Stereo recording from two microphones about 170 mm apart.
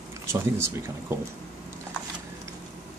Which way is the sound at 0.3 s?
15° right (ahead or behind).